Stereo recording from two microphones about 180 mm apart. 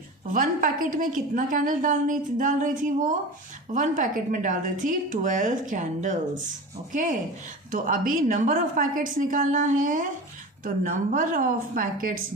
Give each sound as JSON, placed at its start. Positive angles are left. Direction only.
{"t": 0.3, "sound": "a woman's voice", "side_deg": -50}